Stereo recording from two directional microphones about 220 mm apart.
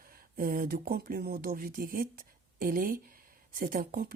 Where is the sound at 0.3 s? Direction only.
40° right (ahead or behind).